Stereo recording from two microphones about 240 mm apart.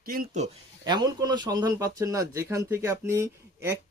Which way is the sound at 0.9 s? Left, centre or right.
Centre.